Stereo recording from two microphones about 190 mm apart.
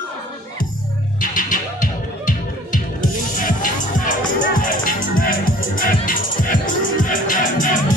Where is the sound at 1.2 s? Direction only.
45° left (ahead or behind).